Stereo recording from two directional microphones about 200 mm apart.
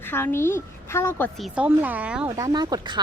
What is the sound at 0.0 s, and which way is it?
A woman's voice, 10° left (ahead or behind).